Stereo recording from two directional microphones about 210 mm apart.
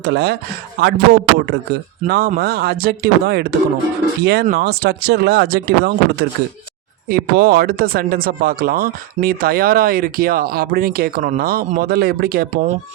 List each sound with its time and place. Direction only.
0.0 s speech: 50° right (ahead or behind)